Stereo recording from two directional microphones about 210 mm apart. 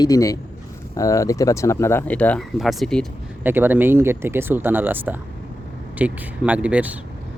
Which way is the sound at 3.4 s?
10° right (ahead or behind).